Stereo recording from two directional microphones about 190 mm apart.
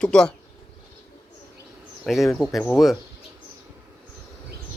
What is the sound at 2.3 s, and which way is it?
Speech, centre (ahead or behind).